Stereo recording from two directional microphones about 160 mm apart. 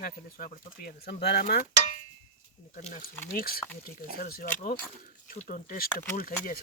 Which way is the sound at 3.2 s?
65° left (ahead or behind).